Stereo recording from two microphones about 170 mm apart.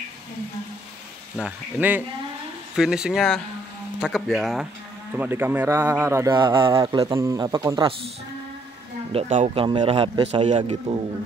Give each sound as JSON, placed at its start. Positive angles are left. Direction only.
{"t": 1.3, "sound": "a man's voice", "side_deg": -5}
{"t": 9.1, "sound": "a man's voice", "side_deg": -40}